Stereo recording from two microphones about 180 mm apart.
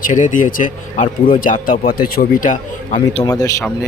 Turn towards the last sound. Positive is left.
turn(degrees=20)  # may be behind; listen again after turning